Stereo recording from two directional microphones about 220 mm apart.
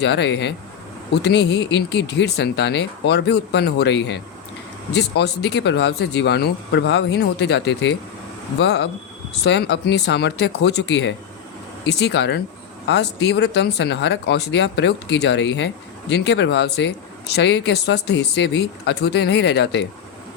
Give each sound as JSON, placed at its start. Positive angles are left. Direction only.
{"t": 0.0, "sound": "speech", "side_deg": 50}